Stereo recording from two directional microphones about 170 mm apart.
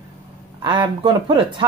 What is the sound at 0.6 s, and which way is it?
Speech, 25° right (ahead or behind).